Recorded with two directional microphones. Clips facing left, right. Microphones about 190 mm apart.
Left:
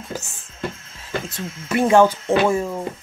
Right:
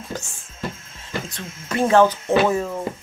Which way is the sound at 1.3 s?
10° left (ahead or behind).